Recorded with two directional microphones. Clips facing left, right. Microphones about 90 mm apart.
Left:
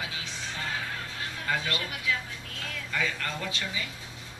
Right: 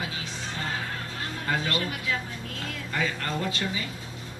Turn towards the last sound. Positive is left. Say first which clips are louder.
# right 5 dB
turn(degrees=-40)  # may be behind; listen again after turning